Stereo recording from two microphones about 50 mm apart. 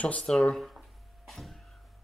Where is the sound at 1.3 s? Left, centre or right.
Centre.